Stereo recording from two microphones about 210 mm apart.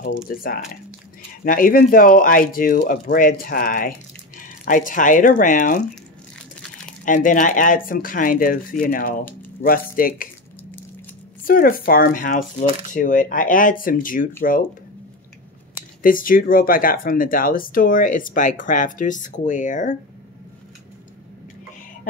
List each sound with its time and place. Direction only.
0.0 s speech: 45° left (ahead or behind)
7.1 s speech: 40° left (ahead or behind)
11.4 s speech: 40° left (ahead or behind)
15.7 s speech: 40° left (ahead or behind)